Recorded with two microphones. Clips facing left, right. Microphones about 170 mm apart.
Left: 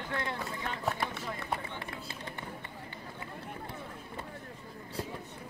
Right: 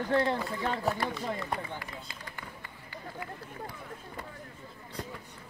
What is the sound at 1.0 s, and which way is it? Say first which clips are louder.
Speech: right 3 dB; centre (ahead or behind).